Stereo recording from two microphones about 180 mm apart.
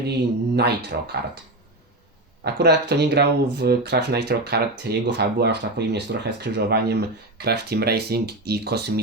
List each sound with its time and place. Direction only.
0.1 s speech: 65° right (ahead or behind)
2.4 s speech: 65° right (ahead or behind)